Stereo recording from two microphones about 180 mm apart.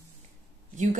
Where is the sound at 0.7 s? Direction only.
45° right (ahead or behind).